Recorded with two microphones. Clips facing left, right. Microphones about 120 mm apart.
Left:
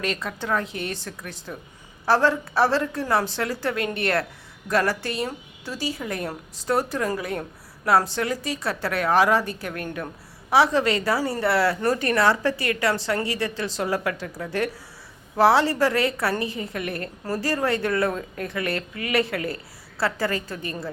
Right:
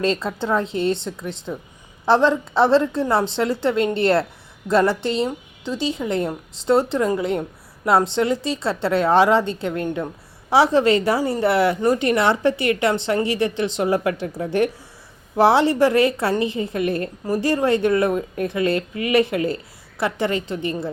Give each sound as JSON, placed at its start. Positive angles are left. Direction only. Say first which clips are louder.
{"t": 0.0, "sound": "a woman's voice", "louder": "right 7 dB", "side_deg": -30}